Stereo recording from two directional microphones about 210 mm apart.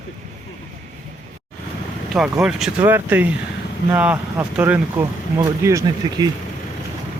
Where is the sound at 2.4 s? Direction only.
5° right (ahead or behind).